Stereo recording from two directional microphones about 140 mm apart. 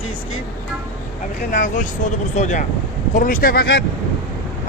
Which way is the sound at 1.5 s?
65° left (ahead or behind).